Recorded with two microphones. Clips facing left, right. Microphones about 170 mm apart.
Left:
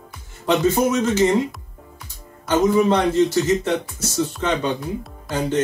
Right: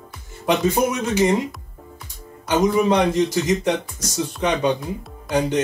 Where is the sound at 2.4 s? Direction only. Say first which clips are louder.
Left 1 dB; 15° right (ahead or behind).